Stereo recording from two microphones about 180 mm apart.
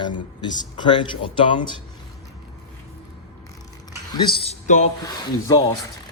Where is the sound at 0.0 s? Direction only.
25° left (ahead or behind).